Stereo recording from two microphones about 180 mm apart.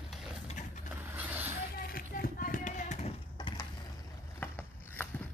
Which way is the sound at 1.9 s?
55° left (ahead or behind).